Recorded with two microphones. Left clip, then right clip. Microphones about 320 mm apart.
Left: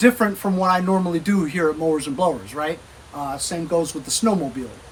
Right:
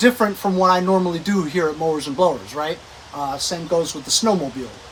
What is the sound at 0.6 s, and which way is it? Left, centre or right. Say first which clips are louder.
Speech: right 3 dB; centre.